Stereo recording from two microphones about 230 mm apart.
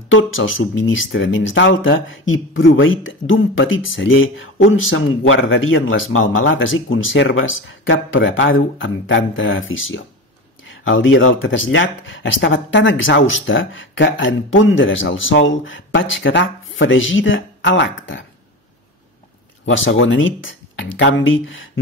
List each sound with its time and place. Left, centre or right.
0.1 s speech: left
19.6 s speech: left